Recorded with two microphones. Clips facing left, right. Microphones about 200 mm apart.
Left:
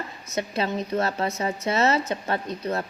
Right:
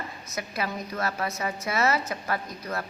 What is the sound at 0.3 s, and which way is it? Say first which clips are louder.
A woman's voice: left 6 dB; 25° left (ahead or behind).